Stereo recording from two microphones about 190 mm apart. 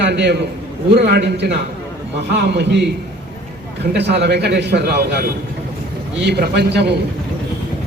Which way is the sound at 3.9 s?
60° right (ahead or behind).